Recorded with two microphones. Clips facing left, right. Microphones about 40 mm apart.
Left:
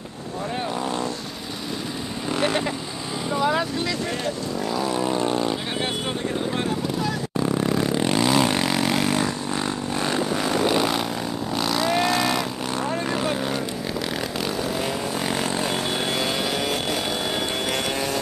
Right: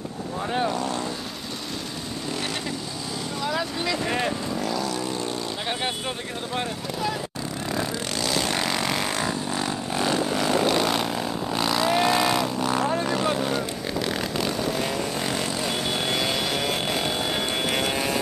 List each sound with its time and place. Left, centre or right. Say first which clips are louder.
3.3 s vehicle: left 5 dB; centre
4.8 s vehicle: left 5 dB; left
6.5 s vehicle: left 4 dB; centre
8.0 s vehicle: left 7 dB; left
8.5 s vehicle: left 3 dB; centre